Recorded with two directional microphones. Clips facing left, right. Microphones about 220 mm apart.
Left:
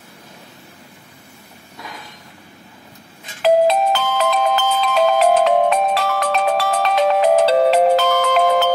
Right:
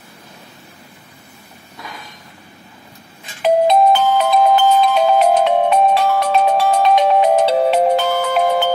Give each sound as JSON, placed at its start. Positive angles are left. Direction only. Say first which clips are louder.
{"t": 3.4, "sound": "music", "louder": "right 2 dB", "side_deg": 90}